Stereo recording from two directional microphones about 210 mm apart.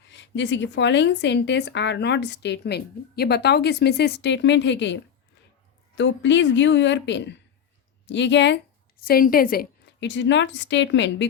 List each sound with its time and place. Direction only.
0.1 s a woman's voice: 60° left (ahead or behind)
6.0 s a woman's voice: 60° left (ahead or behind); by 10.1 s 45° left (ahead or behind)
10.1 s a woman's voice: 60° left (ahead or behind)